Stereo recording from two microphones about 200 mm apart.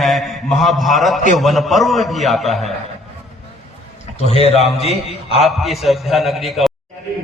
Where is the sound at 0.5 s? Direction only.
Centre (ahead or behind).